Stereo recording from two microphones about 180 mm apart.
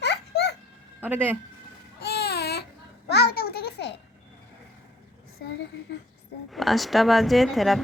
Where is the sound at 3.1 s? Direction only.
65° left (ahead or behind).